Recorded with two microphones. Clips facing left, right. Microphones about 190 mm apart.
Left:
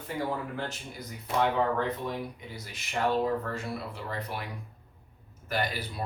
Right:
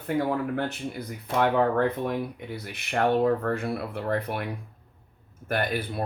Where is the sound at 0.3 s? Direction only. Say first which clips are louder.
Right 6 dB; 60° right (ahead or behind).